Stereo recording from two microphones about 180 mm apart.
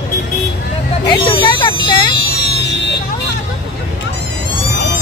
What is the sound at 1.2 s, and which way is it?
Speech, 30° left (ahead or behind).